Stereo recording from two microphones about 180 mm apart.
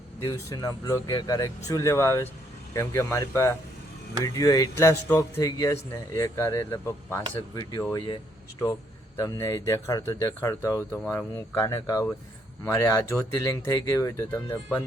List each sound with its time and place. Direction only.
0.3 s speech: 20° left (ahead or behind)